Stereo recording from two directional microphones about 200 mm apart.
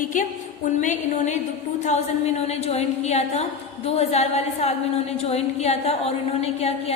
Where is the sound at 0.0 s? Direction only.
40° left (ahead or behind).